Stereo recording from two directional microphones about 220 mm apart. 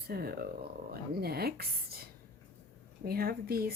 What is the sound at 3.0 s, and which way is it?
Speech, 45° right (ahead or behind).